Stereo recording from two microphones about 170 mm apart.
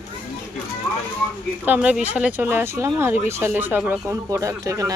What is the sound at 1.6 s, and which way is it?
Speech, 10° right (ahead or behind).